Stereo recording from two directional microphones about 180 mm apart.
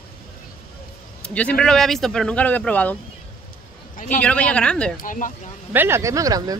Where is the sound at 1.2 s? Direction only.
5° left (ahead or behind).